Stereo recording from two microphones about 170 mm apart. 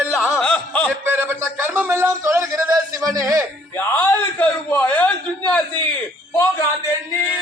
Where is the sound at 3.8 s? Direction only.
15° left (ahead or behind).